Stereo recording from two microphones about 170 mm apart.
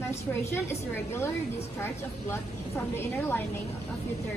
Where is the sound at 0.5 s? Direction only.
15° left (ahead or behind).